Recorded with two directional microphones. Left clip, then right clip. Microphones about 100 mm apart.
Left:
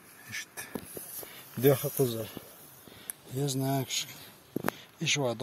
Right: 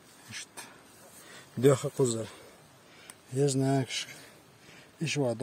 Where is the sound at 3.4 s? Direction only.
90° right.